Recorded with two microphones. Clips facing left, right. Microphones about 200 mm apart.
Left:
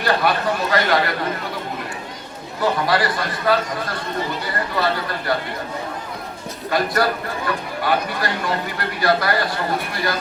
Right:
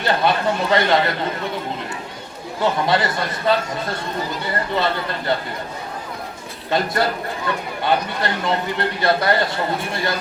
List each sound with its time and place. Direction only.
0.0 s speech: 25° right (ahead or behind)
2.8 s speech: 25° right (ahead or behind)
4.7 s speech: 25° right (ahead or behind)
6.7 s speech: 25° right (ahead or behind)